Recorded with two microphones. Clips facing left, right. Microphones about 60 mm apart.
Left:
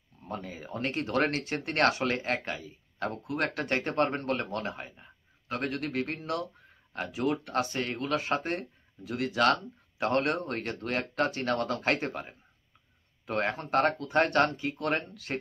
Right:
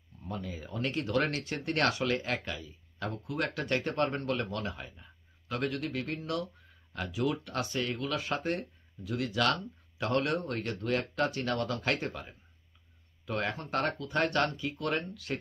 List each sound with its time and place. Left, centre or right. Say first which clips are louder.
0.2 s speech: left 1 dB; left